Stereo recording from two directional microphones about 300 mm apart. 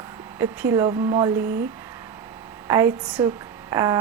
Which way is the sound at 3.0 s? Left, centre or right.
Centre.